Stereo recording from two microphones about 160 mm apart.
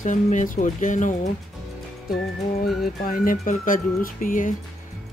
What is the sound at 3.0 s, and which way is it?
Speech, 60° left (ahead or behind).